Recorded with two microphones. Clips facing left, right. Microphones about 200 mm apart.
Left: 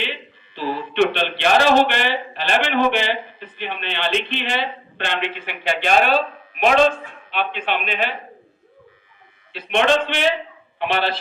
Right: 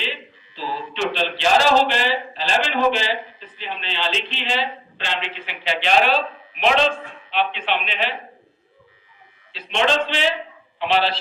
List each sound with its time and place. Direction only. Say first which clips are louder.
0.0 s speech: left 2 dB; 60° left (ahead or behind)
9.5 s a man's voice: left 3 dB; 55° left (ahead or behind)